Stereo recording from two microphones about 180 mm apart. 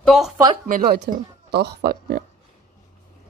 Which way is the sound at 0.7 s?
55° right (ahead or behind).